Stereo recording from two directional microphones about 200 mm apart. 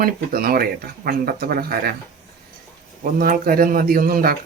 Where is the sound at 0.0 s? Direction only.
50° right (ahead or behind).